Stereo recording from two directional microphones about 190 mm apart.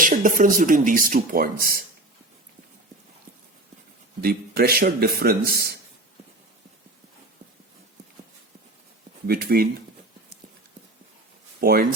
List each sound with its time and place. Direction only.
0.0 s speech: 45° right (ahead or behind)
4.2 s speech: 55° right (ahead or behind)
9.2 s speech: 55° right (ahead or behind)
11.6 s speech: 50° right (ahead or behind)